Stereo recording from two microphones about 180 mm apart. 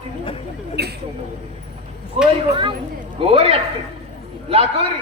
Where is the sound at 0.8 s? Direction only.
65° right (ahead or behind).